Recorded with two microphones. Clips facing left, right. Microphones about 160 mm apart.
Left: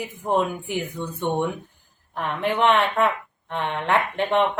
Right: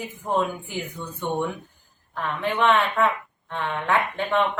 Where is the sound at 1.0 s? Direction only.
25° left (ahead or behind).